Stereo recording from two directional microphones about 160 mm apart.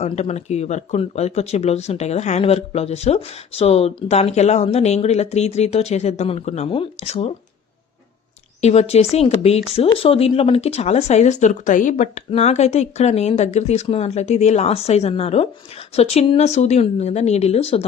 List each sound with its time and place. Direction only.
0.0 s speech: 45° left (ahead or behind)
8.6 s speech: 40° left (ahead or behind)